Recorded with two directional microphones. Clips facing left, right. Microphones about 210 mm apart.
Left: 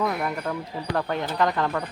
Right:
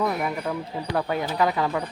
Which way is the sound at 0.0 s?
5° right (ahead or behind).